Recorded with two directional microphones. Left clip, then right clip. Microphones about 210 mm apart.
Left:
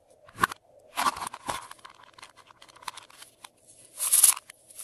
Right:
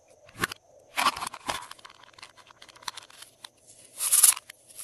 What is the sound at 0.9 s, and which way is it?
Tearing, centre (ahead or behind).